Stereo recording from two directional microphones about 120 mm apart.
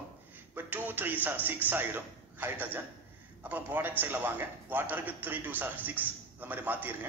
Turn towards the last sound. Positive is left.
turn(degrees=-15)  # may be behind; listen again after turning